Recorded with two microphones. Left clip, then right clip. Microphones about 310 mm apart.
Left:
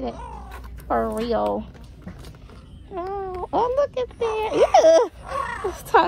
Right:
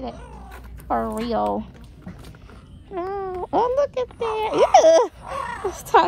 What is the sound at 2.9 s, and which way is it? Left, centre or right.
Speech, right.